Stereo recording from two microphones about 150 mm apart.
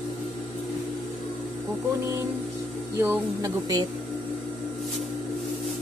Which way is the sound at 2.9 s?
20° right (ahead or behind).